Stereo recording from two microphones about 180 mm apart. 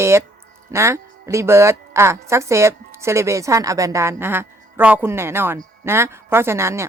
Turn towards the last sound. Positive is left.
turn(degrees=-15)  # may be behind; listen again after turning